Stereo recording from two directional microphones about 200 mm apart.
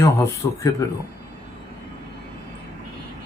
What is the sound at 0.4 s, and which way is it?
Speech, 20° left (ahead or behind).